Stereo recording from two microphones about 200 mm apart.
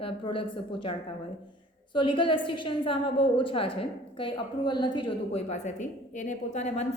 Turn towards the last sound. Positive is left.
turn(degrees=35)  # may be behind; listen again after turning